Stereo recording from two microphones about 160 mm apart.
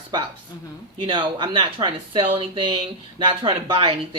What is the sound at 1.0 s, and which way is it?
Speech, 30° right (ahead or behind).